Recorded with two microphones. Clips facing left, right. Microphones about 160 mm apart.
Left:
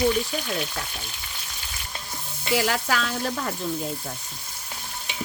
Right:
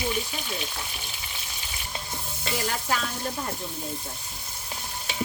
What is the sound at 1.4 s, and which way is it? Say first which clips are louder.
Frying: even; 20° right (ahead or behind).